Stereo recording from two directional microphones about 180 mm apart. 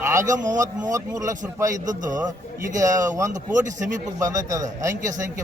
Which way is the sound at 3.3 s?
45° right (ahead or behind).